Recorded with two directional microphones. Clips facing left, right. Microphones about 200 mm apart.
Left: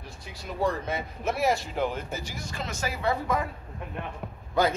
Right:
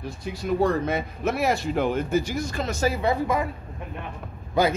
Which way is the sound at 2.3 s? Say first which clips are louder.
Right 8 dB; 45° right (ahead or behind).